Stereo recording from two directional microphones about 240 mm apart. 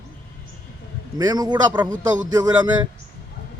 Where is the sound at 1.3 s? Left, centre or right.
Centre.